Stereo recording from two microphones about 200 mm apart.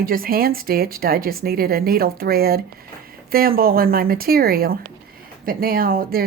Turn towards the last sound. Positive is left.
turn(degrees=-45)  # may be behind; listen again after turning